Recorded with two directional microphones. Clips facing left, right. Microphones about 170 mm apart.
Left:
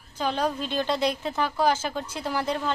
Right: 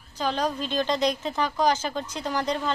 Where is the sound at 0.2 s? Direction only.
10° left (ahead or behind).